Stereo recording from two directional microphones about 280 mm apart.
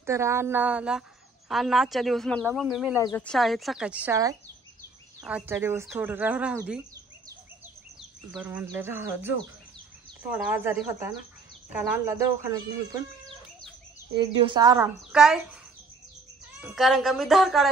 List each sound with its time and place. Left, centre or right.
0.0 s speech: centre
8.3 s speech: centre
10.3 s speech: centre
14.1 s speech: centre
15.0 s speech: centre
16.6 s speech: centre